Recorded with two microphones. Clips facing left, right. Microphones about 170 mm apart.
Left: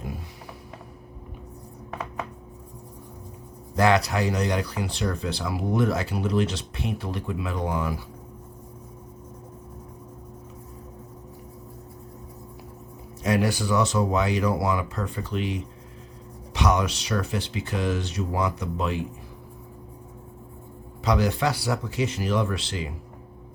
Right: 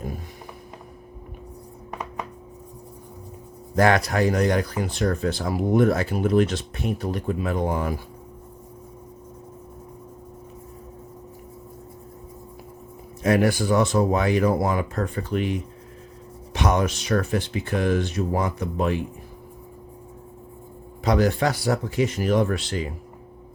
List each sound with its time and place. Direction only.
3.8 s speech: 50° right (ahead or behind)
13.2 s speech: 55° right (ahead or behind)
21.0 s speech: 50° right (ahead or behind)